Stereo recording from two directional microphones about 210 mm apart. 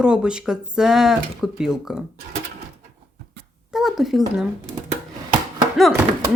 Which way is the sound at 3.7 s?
Centre (ahead or behind).